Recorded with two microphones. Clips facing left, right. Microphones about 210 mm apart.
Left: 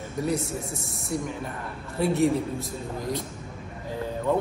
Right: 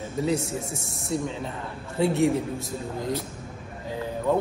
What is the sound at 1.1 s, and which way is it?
Speech, 25° right (ahead or behind).